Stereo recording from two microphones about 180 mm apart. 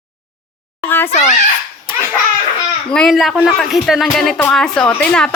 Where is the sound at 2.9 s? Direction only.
Centre (ahead or behind).